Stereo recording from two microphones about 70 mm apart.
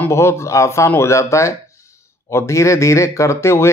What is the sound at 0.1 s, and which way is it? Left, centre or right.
Speech, left.